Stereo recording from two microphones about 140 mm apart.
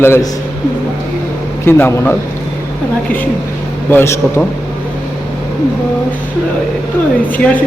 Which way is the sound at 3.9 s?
15° left (ahead or behind).